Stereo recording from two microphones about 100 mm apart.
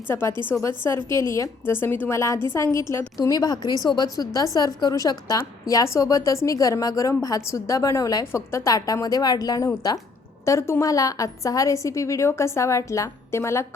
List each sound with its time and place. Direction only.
0.1 s a woman's voice: 25° left (ahead or behind)